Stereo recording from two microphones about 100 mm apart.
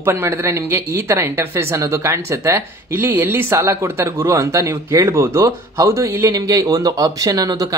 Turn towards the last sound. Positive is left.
turn(degrees=-40)  # may be behind; listen again after turning